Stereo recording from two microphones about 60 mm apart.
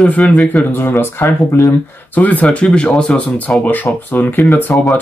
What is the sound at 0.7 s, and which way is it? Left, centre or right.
Speech, left.